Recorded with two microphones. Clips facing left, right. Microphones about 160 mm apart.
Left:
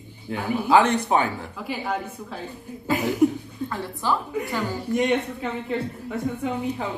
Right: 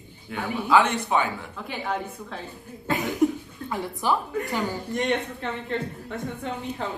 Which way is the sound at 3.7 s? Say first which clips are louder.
Right 1 dB; 15° right (ahead or behind).